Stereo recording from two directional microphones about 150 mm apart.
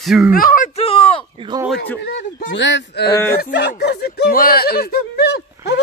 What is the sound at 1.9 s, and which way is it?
Speech, 85° left.